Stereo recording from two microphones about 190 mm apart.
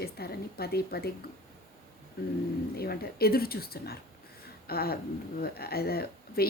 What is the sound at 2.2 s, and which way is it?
Speech, 55° left (ahead or behind).